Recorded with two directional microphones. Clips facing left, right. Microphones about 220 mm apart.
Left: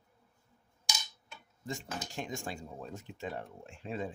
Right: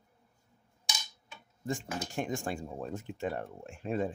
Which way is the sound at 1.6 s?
50° right (ahead or behind).